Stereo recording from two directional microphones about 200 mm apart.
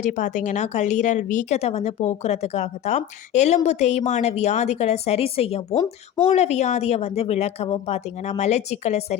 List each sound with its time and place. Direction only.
0.0 s speech: 40° left (ahead or behind)